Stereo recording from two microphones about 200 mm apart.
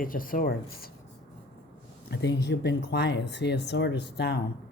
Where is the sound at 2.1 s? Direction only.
60° left (ahead or behind).